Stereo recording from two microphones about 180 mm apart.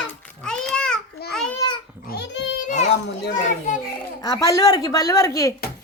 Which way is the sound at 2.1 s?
80° left.